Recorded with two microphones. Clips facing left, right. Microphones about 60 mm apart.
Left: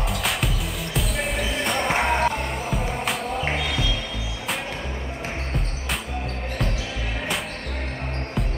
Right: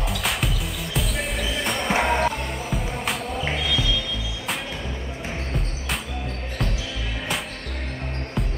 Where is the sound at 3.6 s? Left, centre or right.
Left.